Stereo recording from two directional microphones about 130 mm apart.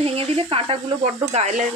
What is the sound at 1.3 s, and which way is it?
Speech, 60° right (ahead or behind).